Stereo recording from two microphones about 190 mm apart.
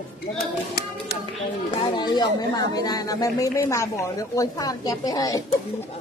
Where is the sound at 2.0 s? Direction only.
20° left (ahead or behind).